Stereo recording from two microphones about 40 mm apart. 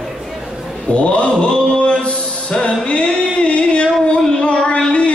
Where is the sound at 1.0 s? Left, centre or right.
Left.